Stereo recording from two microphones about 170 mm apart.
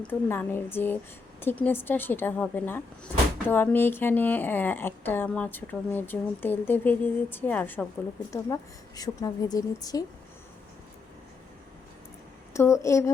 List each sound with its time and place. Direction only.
0.0 s speech: 10° left (ahead or behind)
9.0 s speech: 20° left (ahead or behind)
12.5 s speech: 15° left (ahead or behind)